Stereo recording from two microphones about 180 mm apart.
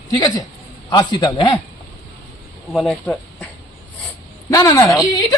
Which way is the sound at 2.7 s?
Centre (ahead or behind).